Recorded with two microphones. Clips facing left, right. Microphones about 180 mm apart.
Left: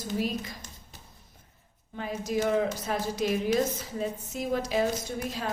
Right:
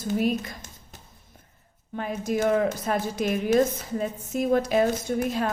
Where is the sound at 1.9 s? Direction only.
55° right (ahead or behind).